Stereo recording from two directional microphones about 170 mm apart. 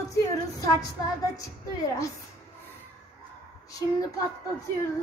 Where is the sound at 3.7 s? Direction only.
20° left (ahead or behind).